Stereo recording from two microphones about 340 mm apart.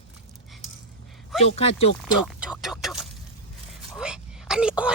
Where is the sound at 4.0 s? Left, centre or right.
Centre.